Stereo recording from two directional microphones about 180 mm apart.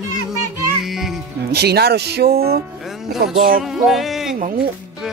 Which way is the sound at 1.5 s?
65° right (ahead or behind).